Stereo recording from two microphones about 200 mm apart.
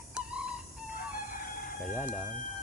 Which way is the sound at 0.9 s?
45° left (ahead or behind).